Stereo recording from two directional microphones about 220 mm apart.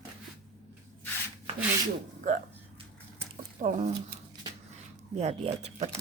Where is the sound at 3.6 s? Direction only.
35° right (ahead or behind).